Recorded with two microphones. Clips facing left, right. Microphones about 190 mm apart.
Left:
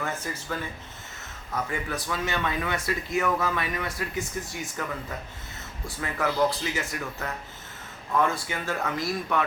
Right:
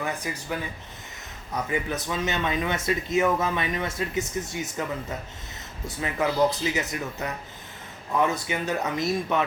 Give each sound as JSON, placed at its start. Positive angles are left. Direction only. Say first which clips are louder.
{"t": 0.0, "sound": "speech", "louder": "right 2 dB", "side_deg": -15}
{"t": 1.7, "sound": "speech", "louder": "right 3 dB", "side_deg": -20}
{"t": 6.0, "sound": "speech", "louder": "right 2 dB", "side_deg": -20}